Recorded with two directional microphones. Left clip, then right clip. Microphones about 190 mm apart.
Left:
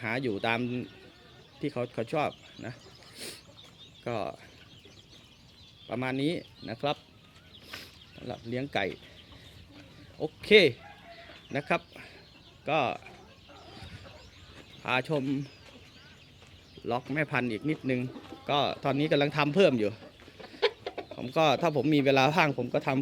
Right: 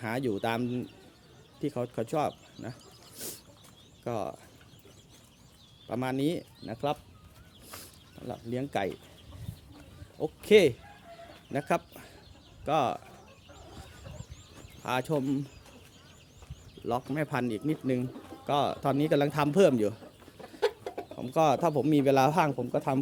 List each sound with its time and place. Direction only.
0.0 s speech: 20° right (ahead or behind)
3.2 s a sound: 20° right (ahead or behind)
4.0 s speech: 10° right (ahead or behind)
5.9 s speech: 15° right (ahead or behind)
7.7 s a sound: 5° right (ahead or behind)
10.2 s speech: 15° right (ahead or behind)
14.8 s speech: 15° right (ahead or behind)
17.1 s speech: 15° right (ahead or behind)
20.6 s chicken: 50° right (ahead or behind)
21.2 s speech: 15° right (ahead or behind)